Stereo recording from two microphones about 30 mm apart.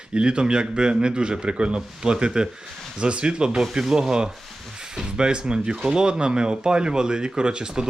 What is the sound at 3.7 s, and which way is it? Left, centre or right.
Speech, centre.